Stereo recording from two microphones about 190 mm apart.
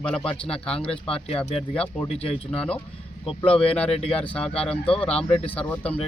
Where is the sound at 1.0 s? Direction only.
30° left (ahead or behind).